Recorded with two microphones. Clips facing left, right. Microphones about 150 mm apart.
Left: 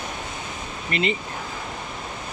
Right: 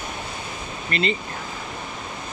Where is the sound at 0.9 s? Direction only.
15° left (ahead or behind).